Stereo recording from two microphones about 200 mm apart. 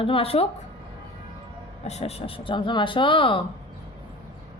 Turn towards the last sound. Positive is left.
turn(degrees=25)  # may be behind; listen again after turning